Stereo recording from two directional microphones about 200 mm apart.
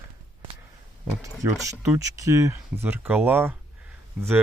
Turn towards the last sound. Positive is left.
turn(degrees=-10)  # may be behind; listen again after turning